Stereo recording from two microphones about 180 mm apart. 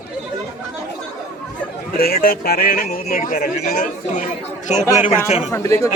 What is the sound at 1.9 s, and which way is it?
Speech, 55° left (ahead or behind).